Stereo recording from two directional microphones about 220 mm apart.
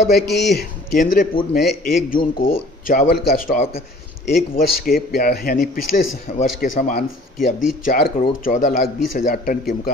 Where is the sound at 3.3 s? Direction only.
40° left (ahead or behind).